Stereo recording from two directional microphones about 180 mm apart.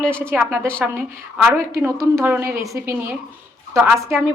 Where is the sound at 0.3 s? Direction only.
10° right (ahead or behind).